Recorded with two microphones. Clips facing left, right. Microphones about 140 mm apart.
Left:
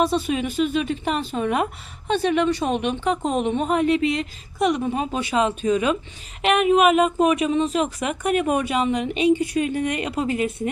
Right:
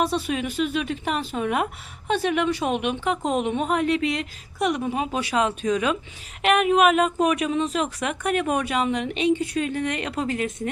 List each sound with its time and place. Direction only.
0.0 s a woman's voice: centre (ahead or behind)